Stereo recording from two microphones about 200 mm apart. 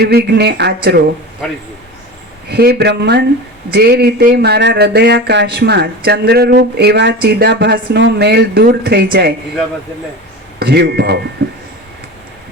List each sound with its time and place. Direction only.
0.0 s speech: 50° right (ahead or behind)
2.5 s speech: 55° right (ahead or behind)
10.6 s speech: 55° right (ahead or behind)
11.4 s a sound: 50° right (ahead or behind)